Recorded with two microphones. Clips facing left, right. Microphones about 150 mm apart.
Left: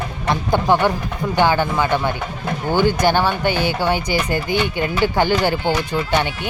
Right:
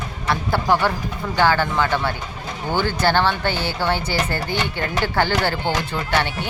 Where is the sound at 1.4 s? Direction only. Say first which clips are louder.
Left 1 dB; 15° left (ahead or behind).